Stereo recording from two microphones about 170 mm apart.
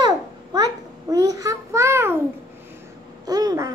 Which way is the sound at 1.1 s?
20° right (ahead or behind).